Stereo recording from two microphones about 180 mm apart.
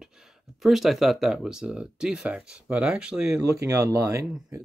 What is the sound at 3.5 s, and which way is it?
Speech, 20° right (ahead or behind).